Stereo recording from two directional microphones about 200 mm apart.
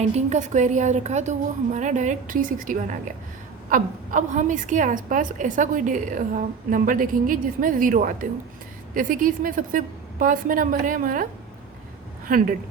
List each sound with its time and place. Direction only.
0.0 s a woman's voice: 35° right (ahead or behind)
12.3 s a woman's voice: 45° right (ahead or behind)